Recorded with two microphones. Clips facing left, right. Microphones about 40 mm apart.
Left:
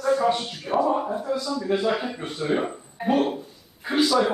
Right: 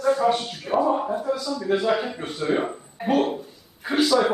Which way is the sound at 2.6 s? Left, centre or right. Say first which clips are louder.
Even; centre.